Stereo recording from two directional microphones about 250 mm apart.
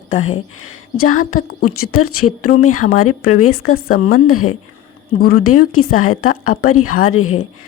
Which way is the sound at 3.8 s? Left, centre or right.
Left.